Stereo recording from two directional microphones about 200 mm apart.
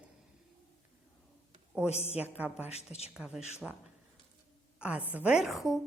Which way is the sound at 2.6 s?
30° left (ahead or behind).